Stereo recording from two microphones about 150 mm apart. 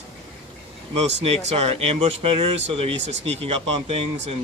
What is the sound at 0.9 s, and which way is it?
Speech, 45° right (ahead or behind).